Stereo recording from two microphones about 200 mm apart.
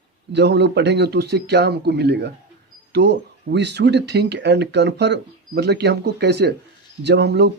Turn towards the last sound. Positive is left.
turn(degrees=-60)  # may be behind; listen again after turning